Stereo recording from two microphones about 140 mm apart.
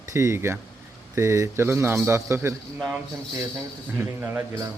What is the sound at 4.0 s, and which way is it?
Speech, 15° right (ahead or behind).